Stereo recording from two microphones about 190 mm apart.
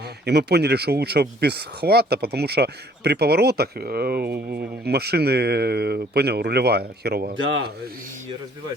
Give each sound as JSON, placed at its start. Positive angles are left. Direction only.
{"t": 0.3, "sound": "speech", "side_deg": -60}